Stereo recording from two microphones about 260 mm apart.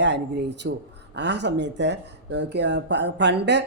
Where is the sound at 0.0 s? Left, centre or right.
Right.